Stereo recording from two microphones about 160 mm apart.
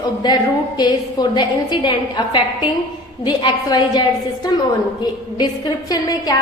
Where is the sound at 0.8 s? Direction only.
25° left (ahead or behind).